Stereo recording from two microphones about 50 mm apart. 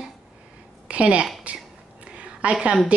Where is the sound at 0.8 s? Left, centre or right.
Right.